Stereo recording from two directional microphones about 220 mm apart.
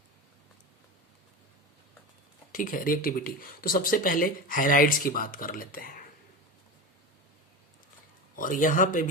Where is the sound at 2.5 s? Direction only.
40° left (ahead or behind).